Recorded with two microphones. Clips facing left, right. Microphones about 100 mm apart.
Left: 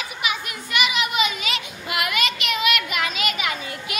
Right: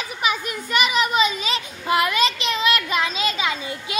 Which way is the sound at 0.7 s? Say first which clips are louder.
Right 3 dB; 40° right (ahead or behind).